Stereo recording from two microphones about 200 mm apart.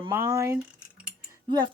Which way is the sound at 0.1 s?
15° right (ahead or behind).